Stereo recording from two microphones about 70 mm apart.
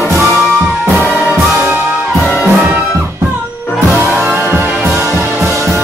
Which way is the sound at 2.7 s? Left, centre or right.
Right.